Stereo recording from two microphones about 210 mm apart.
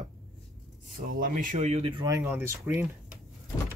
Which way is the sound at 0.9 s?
40° right (ahead or behind).